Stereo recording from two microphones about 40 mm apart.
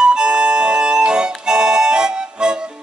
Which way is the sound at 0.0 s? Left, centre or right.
Right.